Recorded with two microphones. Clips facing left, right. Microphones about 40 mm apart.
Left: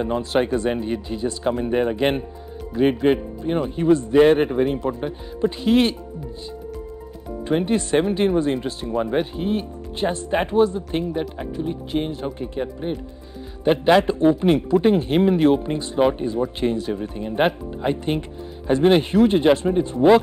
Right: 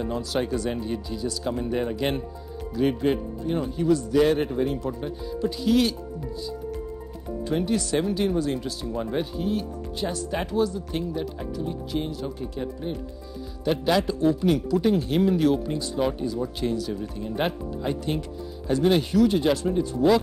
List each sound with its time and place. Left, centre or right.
0.0 s speech: left
7.4 s speech: left